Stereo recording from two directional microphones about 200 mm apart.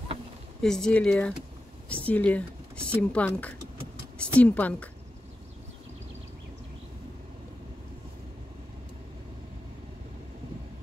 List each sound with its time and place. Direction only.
0.6 s speech: 5° left (ahead or behind)